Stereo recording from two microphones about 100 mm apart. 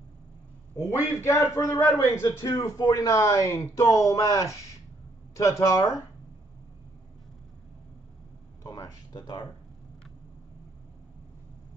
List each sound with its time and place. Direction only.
0.8 s a man's voice: 30° left (ahead or behind)
2.2 s speech: 40° left (ahead or behind)
8.7 s a sound: 40° left (ahead or behind)